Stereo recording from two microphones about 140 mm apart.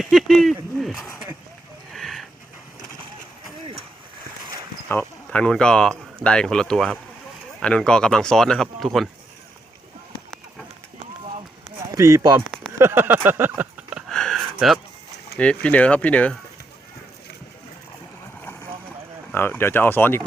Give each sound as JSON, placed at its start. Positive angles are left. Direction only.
{"t": 0.0, "sound": "speech", "side_deg": 0}
{"t": 1.9, "sound": "a sound", "side_deg": 0}
{"t": 4.9, "sound": "speech", "side_deg": 10}
{"t": 11.2, "sound": "run", "side_deg": -45}
{"t": 11.9, "sound": "speech", "side_deg": -20}
{"t": 12.8, "sound": "a sound", "side_deg": -15}
{"t": 14.1, "sound": "a sound", "side_deg": 5}
{"t": 15.4, "sound": "speech", "side_deg": 10}
{"t": 19.3, "sound": "speech", "side_deg": 15}